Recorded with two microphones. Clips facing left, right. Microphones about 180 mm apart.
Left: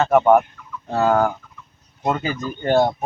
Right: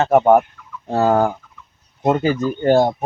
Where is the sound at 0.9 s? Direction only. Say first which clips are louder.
Right 2 dB; 30° right (ahead or behind).